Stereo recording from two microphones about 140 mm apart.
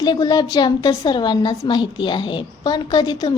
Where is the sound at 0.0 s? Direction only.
30° left (ahead or behind).